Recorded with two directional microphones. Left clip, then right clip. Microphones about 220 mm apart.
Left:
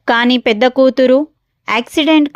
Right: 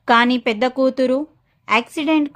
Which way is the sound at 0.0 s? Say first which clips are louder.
Left 3 dB; 25° left (ahead or behind).